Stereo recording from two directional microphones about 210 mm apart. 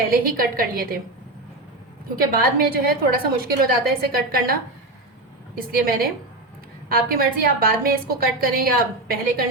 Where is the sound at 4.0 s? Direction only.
45° right (ahead or behind).